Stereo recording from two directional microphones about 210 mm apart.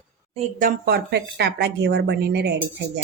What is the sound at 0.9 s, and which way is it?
Speech, 50° right (ahead or behind).